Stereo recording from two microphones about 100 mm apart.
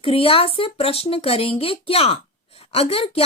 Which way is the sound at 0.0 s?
70° left (ahead or behind).